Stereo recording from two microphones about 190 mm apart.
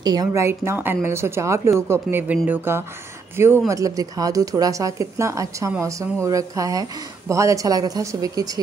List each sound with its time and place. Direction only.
0.0 s speech: 20° right (ahead or behind)